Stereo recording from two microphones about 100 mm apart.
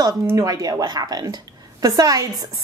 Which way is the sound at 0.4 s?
40° right (ahead or behind).